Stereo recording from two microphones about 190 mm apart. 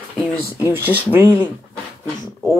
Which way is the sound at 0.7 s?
10° right (ahead or behind).